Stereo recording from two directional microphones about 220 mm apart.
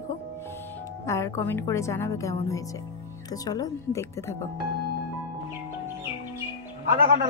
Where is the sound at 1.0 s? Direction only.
15° left (ahead or behind).